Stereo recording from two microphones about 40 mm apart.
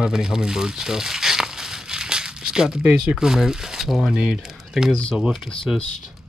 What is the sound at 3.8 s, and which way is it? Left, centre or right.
Speech, centre.